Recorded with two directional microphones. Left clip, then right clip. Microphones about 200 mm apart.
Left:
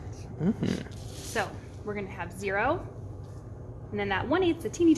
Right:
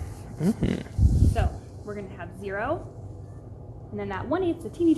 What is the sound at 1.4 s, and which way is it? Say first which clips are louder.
A woman's voice: even; 15° left (ahead or behind).